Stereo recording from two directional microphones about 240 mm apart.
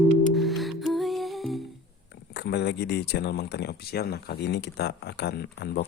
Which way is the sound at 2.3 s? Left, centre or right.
Left.